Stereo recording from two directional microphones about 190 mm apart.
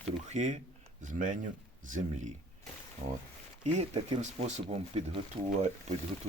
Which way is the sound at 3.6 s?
35° right (ahead or behind).